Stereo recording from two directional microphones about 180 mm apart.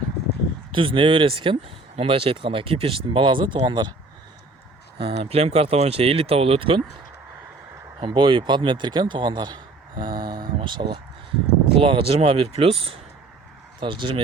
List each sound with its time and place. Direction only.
0.7 s speech: 30° right (ahead or behind)
4.9 s speech: 30° right (ahead or behind)
8.0 s speech: 30° right (ahead or behind)